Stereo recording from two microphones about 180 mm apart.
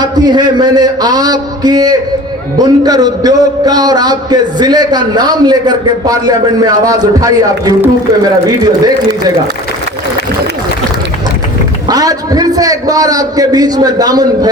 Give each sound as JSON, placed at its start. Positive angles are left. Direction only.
{"t": 0.0, "sound": "a man's voice", "side_deg": -20}
{"t": 11.9, "sound": "a man's voice", "side_deg": -20}